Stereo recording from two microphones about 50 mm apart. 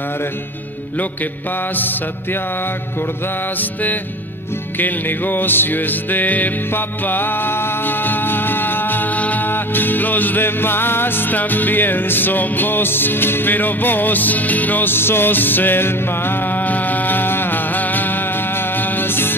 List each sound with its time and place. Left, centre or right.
4.7 s music: left
18.8 s mantra: left